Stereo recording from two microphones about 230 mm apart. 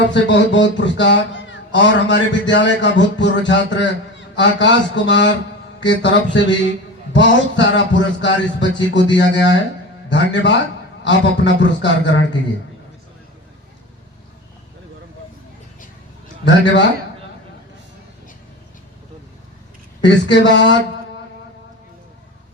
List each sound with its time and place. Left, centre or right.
0.1 s speech: left
20.0 s speech: left